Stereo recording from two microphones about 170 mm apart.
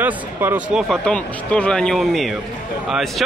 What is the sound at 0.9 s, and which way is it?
A man's voice, 5° left (ahead or behind).